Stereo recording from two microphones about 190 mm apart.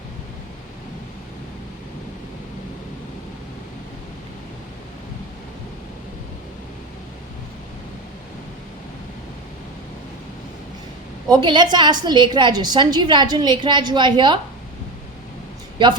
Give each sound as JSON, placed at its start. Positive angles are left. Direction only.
{"t": 11.3, "sound": "a woman's voice", "side_deg": -25}